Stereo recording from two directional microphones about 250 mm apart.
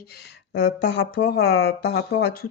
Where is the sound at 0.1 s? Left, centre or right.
Left.